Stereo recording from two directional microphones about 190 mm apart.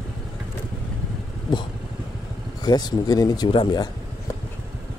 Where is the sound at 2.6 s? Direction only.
20° left (ahead or behind).